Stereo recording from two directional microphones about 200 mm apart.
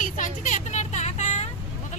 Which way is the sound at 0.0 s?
40° left (ahead or behind).